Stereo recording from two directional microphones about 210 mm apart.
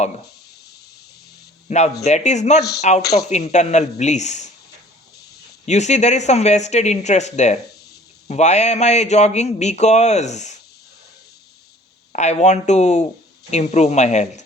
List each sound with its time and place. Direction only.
1.6 s speech: 35° left (ahead or behind)
3.0 s speech: 50° left (ahead or behind)
3.2 s speech: 35° left (ahead or behind)
5.6 s speech: 35° left (ahead or behind)
12.1 s speech: 35° left (ahead or behind)